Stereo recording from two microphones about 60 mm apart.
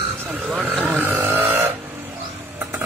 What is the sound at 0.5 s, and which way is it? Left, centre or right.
Vehicle, right.